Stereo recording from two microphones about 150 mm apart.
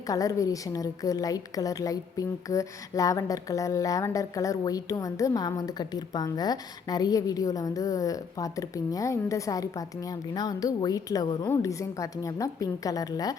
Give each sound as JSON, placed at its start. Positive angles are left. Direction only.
{"t": 0.1, "sound": "a woman's voice", "side_deg": 25}